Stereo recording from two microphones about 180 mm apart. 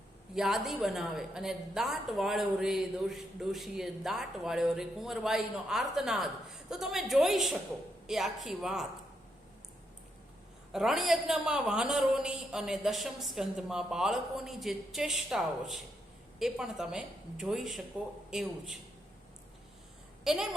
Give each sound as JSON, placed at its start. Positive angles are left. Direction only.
{"t": 0.3, "sound": "a woman's voice", "side_deg": 0}
{"t": 10.7, "sound": "a woman's voice", "side_deg": 0}
{"t": 20.2, "sound": "a woman's voice", "side_deg": 0}